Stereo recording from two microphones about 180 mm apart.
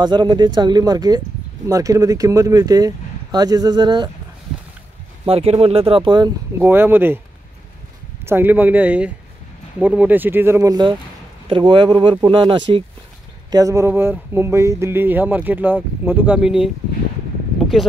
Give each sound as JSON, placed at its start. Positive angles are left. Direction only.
{"t": 0.0, "sound": "speech", "side_deg": -25}
{"t": 5.2, "sound": "speech", "side_deg": -35}
{"t": 6.6, "sound": "speech", "side_deg": -10}
{"t": 8.3, "sound": "speech", "side_deg": -10}